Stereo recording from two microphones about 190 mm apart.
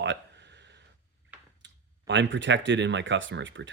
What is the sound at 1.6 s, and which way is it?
Speech, 70° right (ahead or behind).